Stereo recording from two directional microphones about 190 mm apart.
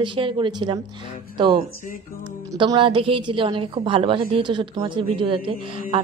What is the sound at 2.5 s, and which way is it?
A man's voice, 20° right (ahead or behind).